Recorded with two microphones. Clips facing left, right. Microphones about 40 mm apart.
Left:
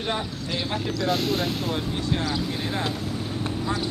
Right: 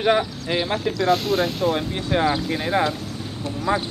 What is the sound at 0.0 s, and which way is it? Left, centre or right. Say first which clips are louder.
Speech: right 9 dB; right.